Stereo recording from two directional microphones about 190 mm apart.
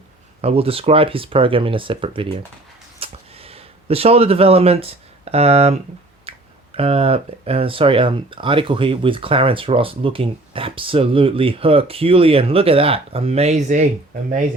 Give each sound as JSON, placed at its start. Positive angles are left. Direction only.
{"t": 0.4, "sound": "speech", "side_deg": -30}
{"t": 3.0, "sound": "a sound", "side_deg": -30}
{"t": 6.3, "sound": "finger snapping", "side_deg": -30}
{"t": 6.7, "sound": "speech", "side_deg": -30}